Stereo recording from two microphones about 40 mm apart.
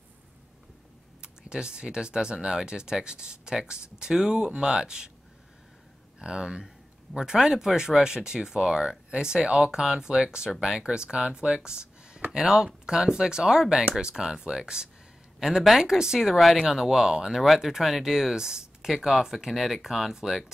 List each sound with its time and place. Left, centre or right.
1.2 s speech: right
6.1 s speech: right; by 16.6 s centre
16.6 s speech: centre